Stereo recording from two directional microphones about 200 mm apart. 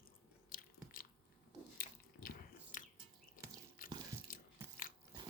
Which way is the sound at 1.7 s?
45° left (ahead or behind).